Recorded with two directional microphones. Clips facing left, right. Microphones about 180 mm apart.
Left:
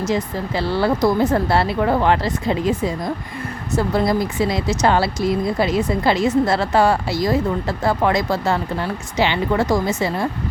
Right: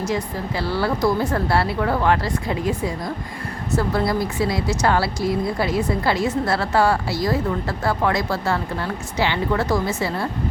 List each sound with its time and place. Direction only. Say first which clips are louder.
0.0 s speech: left 3 dB; 25° left (ahead or behind)